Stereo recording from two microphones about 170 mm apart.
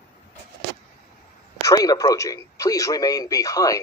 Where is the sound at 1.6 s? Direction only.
20° left (ahead or behind).